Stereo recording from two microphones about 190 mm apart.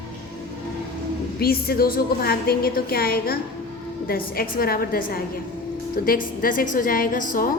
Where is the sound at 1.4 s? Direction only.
55° left (ahead or behind).